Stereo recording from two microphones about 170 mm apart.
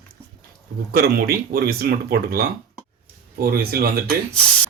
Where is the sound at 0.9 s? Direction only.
60° right (ahead or behind).